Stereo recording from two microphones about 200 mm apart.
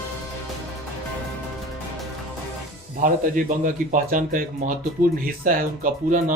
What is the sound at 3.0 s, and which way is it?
Speech, 40° right (ahead or behind).